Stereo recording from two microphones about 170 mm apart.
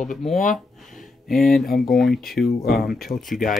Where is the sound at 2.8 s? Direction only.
60° left (ahead or behind).